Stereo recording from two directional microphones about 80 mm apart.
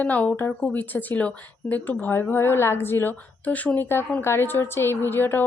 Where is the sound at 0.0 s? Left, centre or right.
Centre.